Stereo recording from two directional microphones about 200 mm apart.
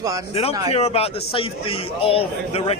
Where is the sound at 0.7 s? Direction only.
30° left (ahead or behind).